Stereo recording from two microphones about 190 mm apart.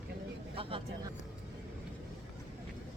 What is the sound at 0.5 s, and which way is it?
Speech, 30° right (ahead or behind).